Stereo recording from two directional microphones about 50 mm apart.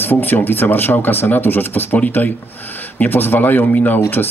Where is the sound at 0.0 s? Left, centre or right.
Left.